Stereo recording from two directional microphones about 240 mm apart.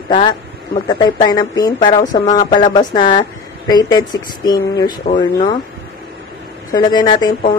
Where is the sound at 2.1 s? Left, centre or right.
Centre.